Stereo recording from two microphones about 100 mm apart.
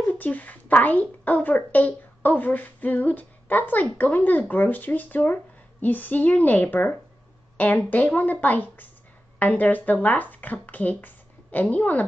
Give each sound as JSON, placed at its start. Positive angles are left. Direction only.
{"t": 0.0, "sound": "speech", "side_deg": 15}